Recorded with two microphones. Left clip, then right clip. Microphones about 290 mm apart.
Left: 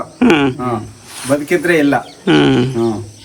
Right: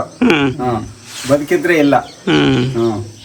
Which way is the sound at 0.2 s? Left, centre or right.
Centre.